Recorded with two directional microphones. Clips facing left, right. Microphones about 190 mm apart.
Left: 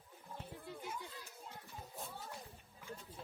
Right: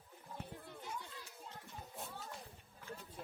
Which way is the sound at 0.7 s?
10° left (ahead or behind).